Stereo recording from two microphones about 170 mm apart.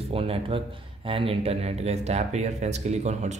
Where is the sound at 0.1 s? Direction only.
35° right (ahead or behind).